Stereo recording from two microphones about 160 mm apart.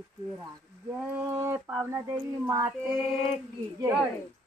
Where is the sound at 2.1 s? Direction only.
15° right (ahead or behind).